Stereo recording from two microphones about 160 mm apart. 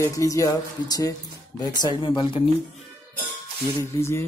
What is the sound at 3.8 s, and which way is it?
Music, 15° left (ahead or behind).